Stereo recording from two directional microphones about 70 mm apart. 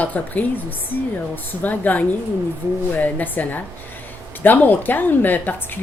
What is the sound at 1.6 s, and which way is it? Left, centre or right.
A woman's voice, left.